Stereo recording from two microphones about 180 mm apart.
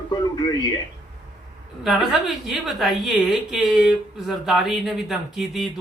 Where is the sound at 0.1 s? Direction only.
25° left (ahead or behind).